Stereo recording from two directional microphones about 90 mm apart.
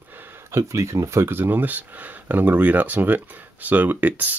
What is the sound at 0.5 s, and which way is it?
Speech, 35° right (ahead or behind).